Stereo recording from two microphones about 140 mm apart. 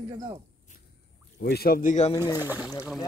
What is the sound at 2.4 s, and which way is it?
Speech, 15° right (ahead or behind).